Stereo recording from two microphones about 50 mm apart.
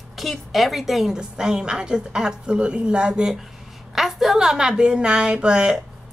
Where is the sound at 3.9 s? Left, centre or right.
Centre.